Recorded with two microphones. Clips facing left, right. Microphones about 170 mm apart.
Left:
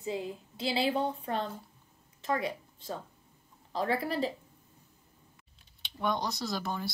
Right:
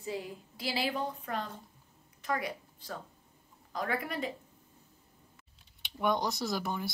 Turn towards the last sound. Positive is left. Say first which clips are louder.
# right 1 dB
turn(degrees=-15)  # may be behind; listen again after turning